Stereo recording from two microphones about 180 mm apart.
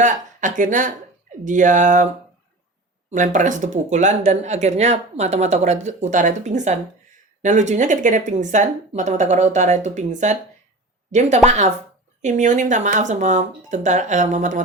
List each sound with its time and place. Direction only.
0.0 s speech: 45° right (ahead or behind)
3.1 s speech: 45° right (ahead or behind)